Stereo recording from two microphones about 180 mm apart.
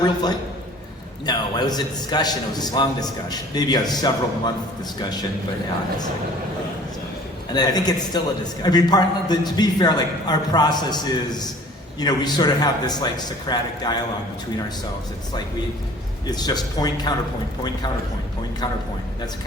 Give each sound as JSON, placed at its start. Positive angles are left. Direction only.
{"t": 0.0, "sound": "a man's voice", "side_deg": 20}
{"t": 7.5, "sound": "a man's voice", "side_deg": 20}
{"t": 16.3, "sound": "a man's voice", "side_deg": 20}